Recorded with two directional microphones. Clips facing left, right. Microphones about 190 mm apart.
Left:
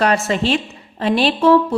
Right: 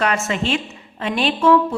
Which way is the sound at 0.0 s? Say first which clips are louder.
Left 4 dB; 35° left (ahead or behind).